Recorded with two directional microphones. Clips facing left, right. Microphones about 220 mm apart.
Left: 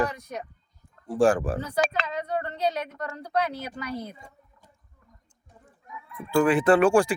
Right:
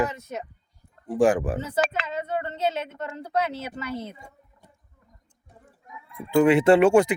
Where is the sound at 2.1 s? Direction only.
25° right (ahead or behind).